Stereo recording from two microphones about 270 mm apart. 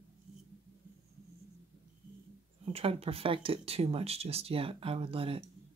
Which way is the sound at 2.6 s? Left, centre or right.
Right.